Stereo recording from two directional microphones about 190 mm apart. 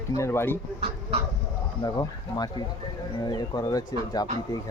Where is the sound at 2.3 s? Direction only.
20° left (ahead or behind).